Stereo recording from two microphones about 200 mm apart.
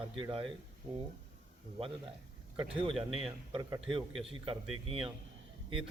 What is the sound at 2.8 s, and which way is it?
Speech, 25° right (ahead or behind).